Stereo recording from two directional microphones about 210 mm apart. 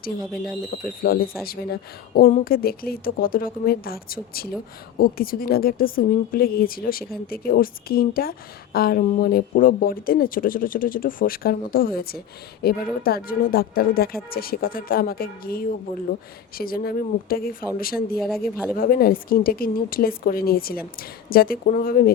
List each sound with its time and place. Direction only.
1.0 s a woman's voice: 45° left (ahead or behind)
18.2 s speech: centre (ahead or behind)
18.8 s a woman's voice: 45° left (ahead or behind)